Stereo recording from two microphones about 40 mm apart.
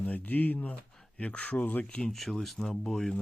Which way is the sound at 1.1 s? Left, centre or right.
Left.